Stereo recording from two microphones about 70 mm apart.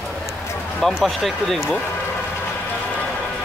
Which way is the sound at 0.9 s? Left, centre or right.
Centre.